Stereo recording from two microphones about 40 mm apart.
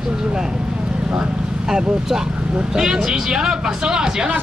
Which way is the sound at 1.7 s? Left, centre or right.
Centre.